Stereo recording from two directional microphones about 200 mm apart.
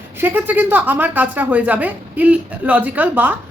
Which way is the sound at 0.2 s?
10° right (ahead or behind).